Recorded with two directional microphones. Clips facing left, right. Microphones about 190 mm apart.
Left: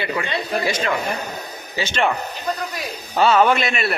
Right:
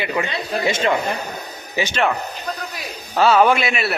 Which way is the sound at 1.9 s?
5° right (ahead or behind).